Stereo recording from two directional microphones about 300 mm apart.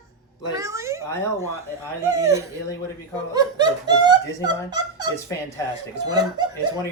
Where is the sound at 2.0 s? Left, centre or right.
Centre.